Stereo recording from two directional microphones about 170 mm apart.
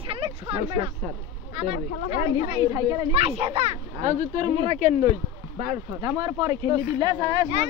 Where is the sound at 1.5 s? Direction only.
35° right (ahead or behind).